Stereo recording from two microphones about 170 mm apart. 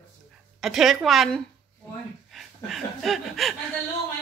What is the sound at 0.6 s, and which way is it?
Speech, centre (ahead or behind).